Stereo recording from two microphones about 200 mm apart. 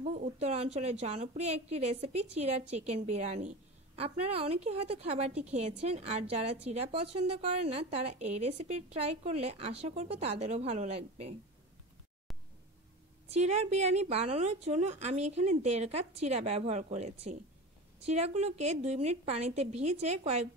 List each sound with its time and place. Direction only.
0.0 s a woman's voice: 35° right (ahead or behind)
13.3 s a woman's voice: 35° right (ahead or behind)